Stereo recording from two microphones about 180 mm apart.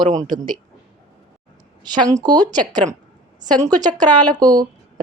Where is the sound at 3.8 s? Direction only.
20° right (ahead or behind).